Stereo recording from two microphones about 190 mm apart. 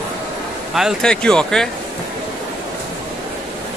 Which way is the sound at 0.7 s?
Centre (ahead or behind).